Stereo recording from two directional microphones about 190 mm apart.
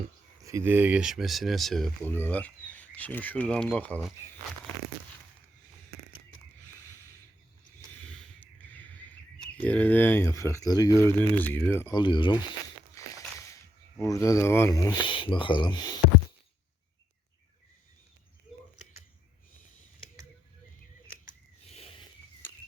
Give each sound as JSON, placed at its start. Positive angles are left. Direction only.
{"t": 0.4, "sound": "speech", "side_deg": -15}
{"t": 8.0, "sound": "a sound", "side_deg": 10}
{"t": 9.6, "sound": "speech", "side_deg": 10}
{"t": 11.9, "sound": "speech", "side_deg": 25}
{"t": 13.0, "sound": "walk", "side_deg": 15}
{"t": 14.0, "sound": "speech", "side_deg": 15}